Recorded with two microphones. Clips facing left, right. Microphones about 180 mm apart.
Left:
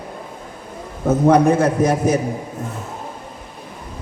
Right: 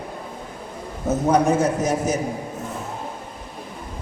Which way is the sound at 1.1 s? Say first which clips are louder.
Left 5 dB; 55° left (ahead or behind).